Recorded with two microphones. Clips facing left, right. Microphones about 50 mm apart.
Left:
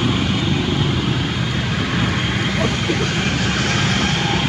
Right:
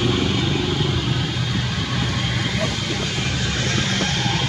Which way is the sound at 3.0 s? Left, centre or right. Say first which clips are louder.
Left 5 dB; left.